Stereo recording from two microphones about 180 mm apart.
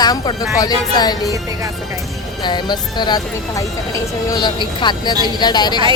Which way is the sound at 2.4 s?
25° left (ahead or behind).